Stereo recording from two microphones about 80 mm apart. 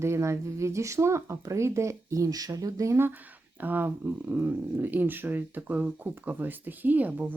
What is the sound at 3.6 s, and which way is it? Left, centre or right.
Speech, right.